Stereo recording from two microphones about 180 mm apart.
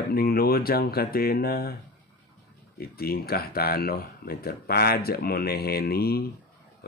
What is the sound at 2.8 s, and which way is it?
Speech, 55° left (ahead or behind).